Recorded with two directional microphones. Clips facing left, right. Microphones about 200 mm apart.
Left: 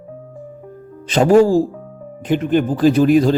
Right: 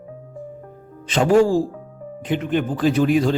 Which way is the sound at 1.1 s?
40° left (ahead or behind).